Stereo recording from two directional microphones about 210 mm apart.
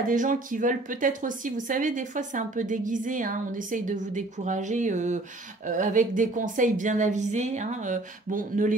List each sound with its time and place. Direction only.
0.0 s speech: 40° right (ahead or behind)